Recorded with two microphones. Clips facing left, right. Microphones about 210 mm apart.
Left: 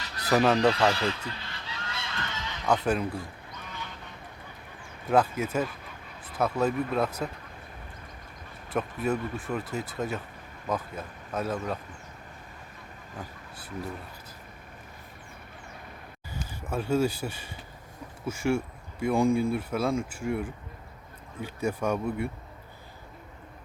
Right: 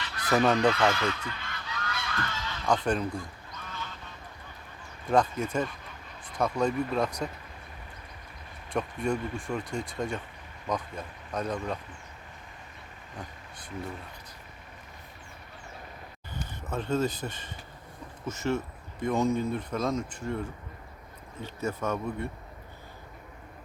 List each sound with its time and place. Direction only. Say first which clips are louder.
0.0 s goose: left 1 dB; 40° left (ahead or behind)
0.3 s speech: left 1 dB; 5° left (ahead or behind)
0.7 s speech: left 1 dB; 35° left (ahead or behind)
1.3 s goose: right 1 dB; 30° left (ahead or behind)
2.6 s speech: left 1 dB; 5° left (ahead or behind)
5.0 s speech: left 1 dB; 5° left (ahead or behind)
8.7 s speech: left 1 dB; 5° left (ahead or behind)
16.3 s speech: left 2 dB; 10° left (ahead or behind)